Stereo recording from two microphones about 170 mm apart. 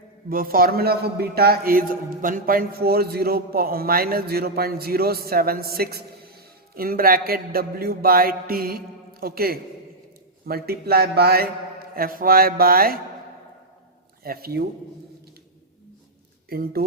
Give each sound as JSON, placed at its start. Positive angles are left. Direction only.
{"t": 0.3, "sound": "a man's voice", "side_deg": -60}
{"t": 14.3, "sound": "a man's voice", "side_deg": -65}
{"t": 16.5, "sound": "a man's voice", "side_deg": -60}